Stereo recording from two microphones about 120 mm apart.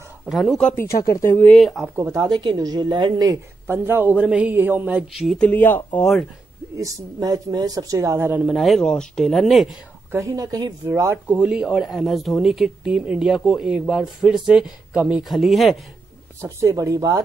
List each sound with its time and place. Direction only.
0.2 s speech: centre (ahead or behind)
0.7 s speech: 25° left (ahead or behind)
1.5 s speech: 5° left (ahead or behind)
2.0 s speech: 20° right (ahead or behind)
2.2 s a woman's voice: 35° right (ahead or behind)
3.6 s a man's voice: 20° right (ahead or behind); by 5.4 s 5° right (ahead or behind)
5.4 s speech: 15° left (ahead or behind)
6.8 s speech: 30° right (ahead or behind)
8.5 s speech: centre (ahead or behind)
10.1 s a woman's voice: 30° right (ahead or behind)
10.9 s speech: 20° right (ahead or behind)
11.6 s speech: centre (ahead or behind)
16.3 s speech: 25° right (ahead or behind)